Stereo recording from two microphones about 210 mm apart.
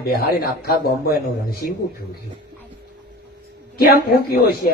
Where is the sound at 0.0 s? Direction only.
50° left (ahead or behind).